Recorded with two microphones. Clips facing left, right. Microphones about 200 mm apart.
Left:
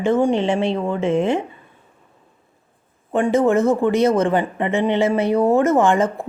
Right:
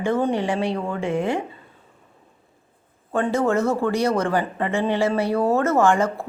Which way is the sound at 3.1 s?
20° left (ahead or behind).